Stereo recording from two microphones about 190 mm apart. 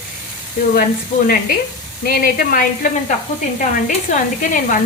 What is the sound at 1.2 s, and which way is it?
Sizzle, 50° left (ahead or behind).